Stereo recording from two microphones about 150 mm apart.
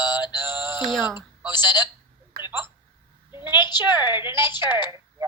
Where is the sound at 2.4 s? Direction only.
75° right (ahead or behind).